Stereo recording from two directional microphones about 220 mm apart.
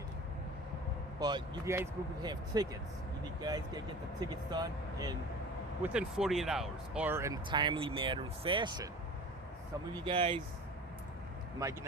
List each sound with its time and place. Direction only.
1.2 s speech: 15° right (ahead or behind)
5.8 s speech: 5° right (ahead or behind)
9.9 s speech: 20° right (ahead or behind)
11.6 s speech: 15° right (ahead or behind)